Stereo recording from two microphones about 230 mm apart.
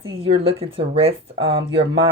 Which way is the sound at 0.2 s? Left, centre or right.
Right.